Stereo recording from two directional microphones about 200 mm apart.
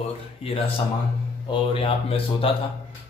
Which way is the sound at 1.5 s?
25° left (ahead or behind).